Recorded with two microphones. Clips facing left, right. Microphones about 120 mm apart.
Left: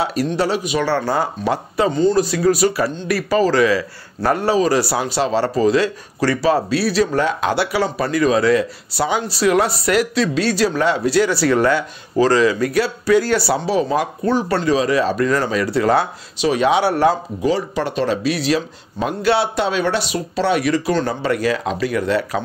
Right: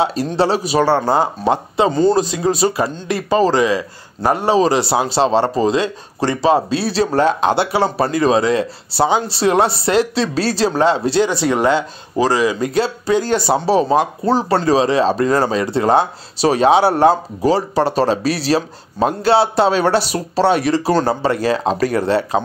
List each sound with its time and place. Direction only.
0.0 s a man's voice: 25° right (ahead or behind)
1.9 s speech: 40° right (ahead or behind)
2.1 s a man's voice: 20° right (ahead or behind)
16.3 s speech: 35° right (ahead or behind)